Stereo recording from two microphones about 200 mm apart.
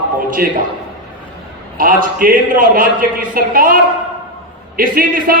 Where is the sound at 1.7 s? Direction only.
45° right (ahead or behind).